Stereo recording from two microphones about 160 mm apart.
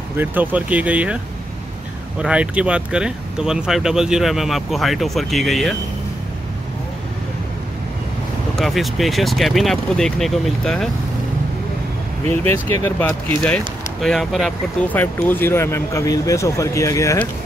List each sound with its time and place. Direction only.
0.2 s speech: 10° right (ahead or behind)
8.5 s speech: centre (ahead or behind)
12.3 s speech: 15° left (ahead or behind)
14.0 s speech: centre (ahead or behind); by 17.2 s 20° left (ahead or behind)